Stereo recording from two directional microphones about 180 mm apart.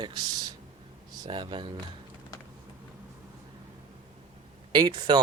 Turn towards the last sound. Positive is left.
turn(degrees=-25)  # may be behind; listen again after turning